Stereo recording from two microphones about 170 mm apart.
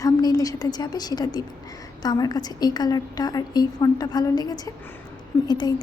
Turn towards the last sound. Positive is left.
turn(degrees=25)  # may be behind; listen again after turning